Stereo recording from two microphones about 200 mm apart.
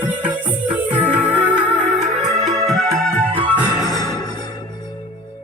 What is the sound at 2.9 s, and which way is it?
Music, 5° left (ahead or behind).